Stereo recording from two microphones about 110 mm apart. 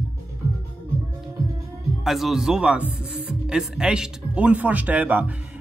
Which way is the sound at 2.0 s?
Centre (ahead or behind).